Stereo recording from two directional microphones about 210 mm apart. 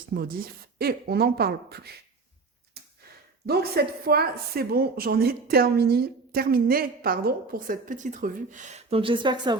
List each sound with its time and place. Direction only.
0.1 s speech: 45° right (ahead or behind)
2.8 s a sound: 50° right (ahead or behind)
3.4 s speech: 45° right (ahead or behind); by 9.6 s 20° right (ahead or behind)